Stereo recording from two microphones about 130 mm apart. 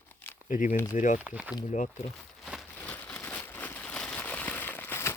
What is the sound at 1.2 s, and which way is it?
Speech, 10° right (ahead or behind).